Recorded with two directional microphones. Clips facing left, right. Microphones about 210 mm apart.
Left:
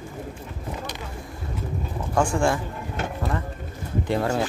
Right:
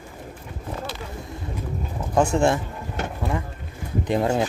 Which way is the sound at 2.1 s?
20° right (ahead or behind).